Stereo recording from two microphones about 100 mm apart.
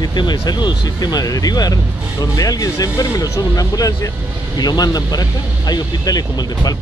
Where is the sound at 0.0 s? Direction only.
45° left (ahead or behind).